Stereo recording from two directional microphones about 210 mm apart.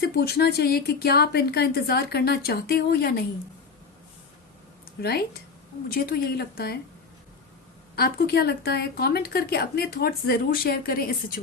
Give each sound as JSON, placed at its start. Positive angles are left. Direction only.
{"t": 0.0, "sound": "speech", "side_deg": 50}
{"t": 4.9, "sound": "speech", "side_deg": 50}
{"t": 7.9, "sound": "speech", "side_deg": 45}